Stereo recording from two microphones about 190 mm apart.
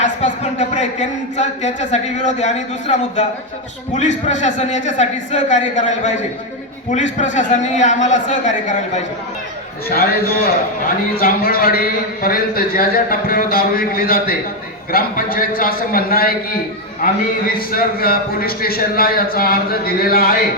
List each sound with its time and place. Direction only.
0.0 s speech: 40° left (ahead or behind)
9.9 s a man's voice: 50° left (ahead or behind)
17.6 s a man's voice: 50° left (ahead or behind)